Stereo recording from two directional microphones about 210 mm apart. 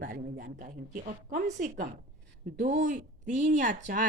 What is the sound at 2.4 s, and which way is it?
Speech, 35° right (ahead or behind).